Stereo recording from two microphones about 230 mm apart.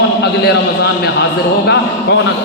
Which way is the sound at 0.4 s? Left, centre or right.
Left.